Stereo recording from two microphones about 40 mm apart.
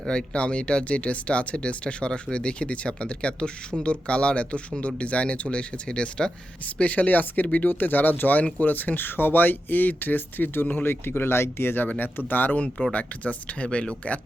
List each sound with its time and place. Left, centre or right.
0.1 s speech: left
6.7 s speech: left
10.8 s speech: left
11.9 s speech: left
12.9 s speech: left